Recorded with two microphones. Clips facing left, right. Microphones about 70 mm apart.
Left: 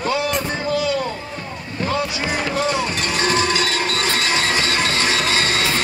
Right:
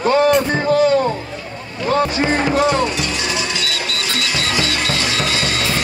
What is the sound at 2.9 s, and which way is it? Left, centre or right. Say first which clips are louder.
Music: left 2 dB; left.